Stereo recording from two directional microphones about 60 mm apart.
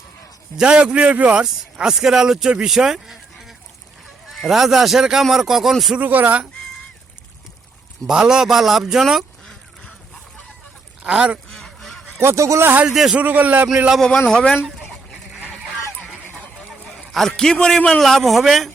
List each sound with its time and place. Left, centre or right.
0.5 s a man's voice: centre
6.0 s a man's voice: right
8.0 s a man's voice: centre
11.0 s a man's voice: centre
11.4 s goose: centre
12.2 s a man's voice: right
12.9 s speech: centre
13.1 s a man's voice: right
14.0 s a man's voice: centre
14.5 s speech: centre
16.2 s honk: left
16.6 s a man's voice: centre